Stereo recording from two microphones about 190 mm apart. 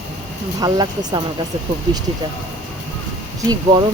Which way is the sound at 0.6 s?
20° right (ahead or behind).